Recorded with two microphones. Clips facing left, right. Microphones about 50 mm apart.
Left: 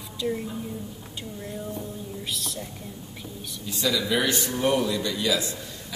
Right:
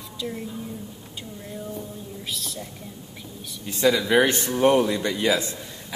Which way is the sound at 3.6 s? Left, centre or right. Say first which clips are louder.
Right 6 dB; right.